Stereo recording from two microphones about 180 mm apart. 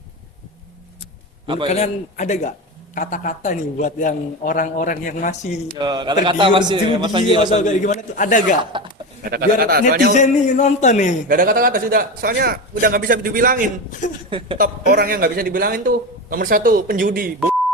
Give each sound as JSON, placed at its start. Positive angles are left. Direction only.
{"t": 1.7, "sound": "a man's voice", "side_deg": 40}
{"t": 5.8, "sound": "a man's voice", "side_deg": -25}
{"t": 7.5, "sound": "a man's voice", "side_deg": 45}
{"t": 8.7, "sound": "a sound", "side_deg": -25}
{"t": 9.2, "sound": "speech", "side_deg": -55}
{"t": 10.2, "sound": "speech", "side_deg": 40}
{"t": 11.3, "sound": "a man's voice", "side_deg": -55}
{"t": 14.3, "sound": "a man's voice", "side_deg": -30}
{"t": 14.6, "sound": "a man's voice", "side_deg": -55}